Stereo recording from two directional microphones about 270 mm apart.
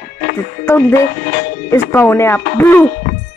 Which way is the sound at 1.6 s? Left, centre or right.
Centre.